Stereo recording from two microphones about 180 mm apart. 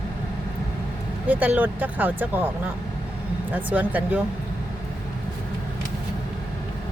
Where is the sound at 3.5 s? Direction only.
10° right (ahead or behind).